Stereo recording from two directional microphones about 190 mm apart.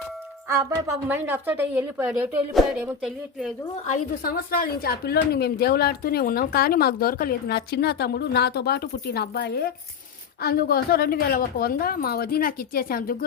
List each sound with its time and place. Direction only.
0.4 s a woman's voice: 15° right (ahead or behind)
3.8 s a woman's voice: 45° left (ahead or behind)